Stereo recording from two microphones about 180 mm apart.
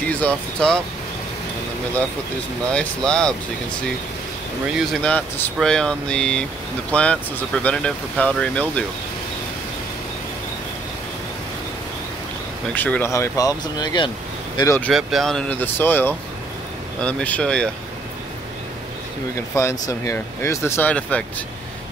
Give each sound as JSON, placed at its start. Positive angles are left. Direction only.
{"t": 0.2, "sound": "speech", "side_deg": 5}
{"t": 2.7, "sound": "speech", "side_deg": 5}
{"t": 4.7, "sound": "speech", "side_deg": 5}
{"t": 12.7, "sound": "speech", "side_deg": 10}
{"t": 14.9, "sound": "speech", "side_deg": 0}
{"t": 19.5, "sound": "speech", "side_deg": 15}